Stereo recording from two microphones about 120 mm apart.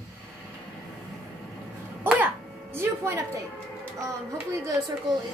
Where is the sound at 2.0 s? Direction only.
20° right (ahead or behind).